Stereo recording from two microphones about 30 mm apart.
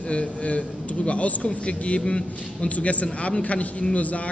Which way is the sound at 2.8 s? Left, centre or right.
Left.